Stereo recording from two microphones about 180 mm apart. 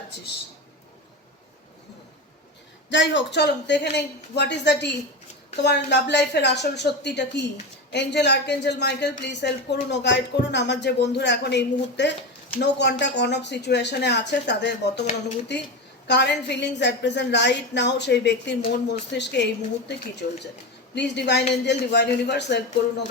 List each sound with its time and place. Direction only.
2.9 s speech: 80° left